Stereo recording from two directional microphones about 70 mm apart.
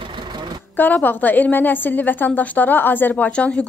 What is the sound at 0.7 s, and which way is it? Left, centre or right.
A woman's voice, left.